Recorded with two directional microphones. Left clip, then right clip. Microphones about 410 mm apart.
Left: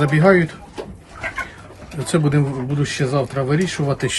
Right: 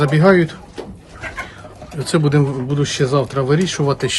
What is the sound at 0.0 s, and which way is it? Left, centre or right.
Speech, centre.